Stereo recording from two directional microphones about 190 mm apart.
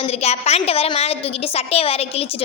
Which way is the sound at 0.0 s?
35° left (ahead or behind).